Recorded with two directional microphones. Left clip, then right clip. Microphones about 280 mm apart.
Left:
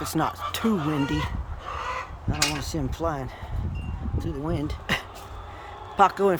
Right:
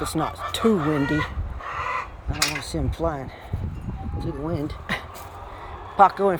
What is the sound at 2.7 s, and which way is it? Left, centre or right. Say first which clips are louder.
Speech: right 2 dB; centre.